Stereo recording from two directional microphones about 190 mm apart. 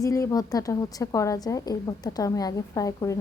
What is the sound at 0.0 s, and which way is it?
A woman's voice, 15° left (ahead or behind).